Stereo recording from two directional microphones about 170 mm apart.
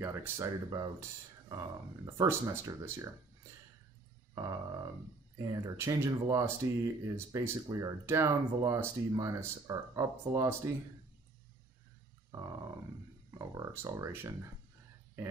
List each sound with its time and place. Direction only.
0.0 s speech: 15° right (ahead or behind)
4.4 s speech: 20° right (ahead or behind)
12.3 s grunt: 20° right (ahead or behind)
13.3 s speech: 25° right (ahead or behind)